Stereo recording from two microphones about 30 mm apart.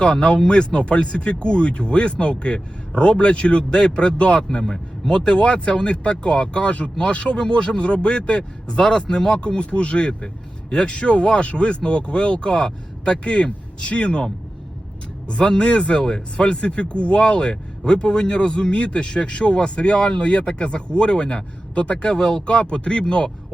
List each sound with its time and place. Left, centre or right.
0.0 s speech: left
15.3 s speech: left
18.7 s speech: left
22.2 s speech: left
22.4 s speech: left